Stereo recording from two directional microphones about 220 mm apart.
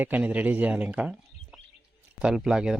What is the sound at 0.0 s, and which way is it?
Speech, 5° right (ahead or behind).